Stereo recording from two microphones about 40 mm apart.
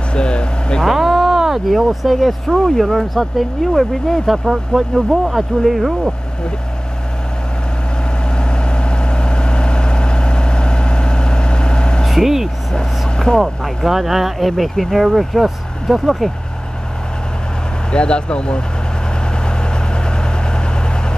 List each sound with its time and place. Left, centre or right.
0.1 s vehicle: left
0.8 s speech: centre
4.5 s speech: centre
8.4 s vehicle: left
12.1 s vehicle: centre
12.7 s vehicle: centre
13.4 s speech: centre
17.9 s speech: left